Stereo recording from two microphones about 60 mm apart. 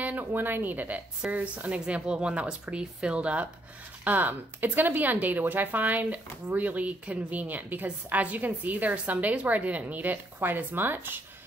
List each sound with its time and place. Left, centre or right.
0.0 s speech: right